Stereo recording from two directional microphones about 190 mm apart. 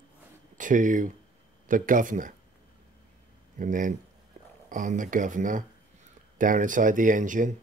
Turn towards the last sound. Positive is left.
turn(degrees=-45)  # may be behind; listen again after turning